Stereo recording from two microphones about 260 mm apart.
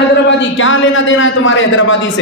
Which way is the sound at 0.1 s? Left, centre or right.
Left.